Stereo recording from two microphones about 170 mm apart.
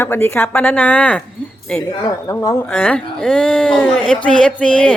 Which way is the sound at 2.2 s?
15° left (ahead or behind).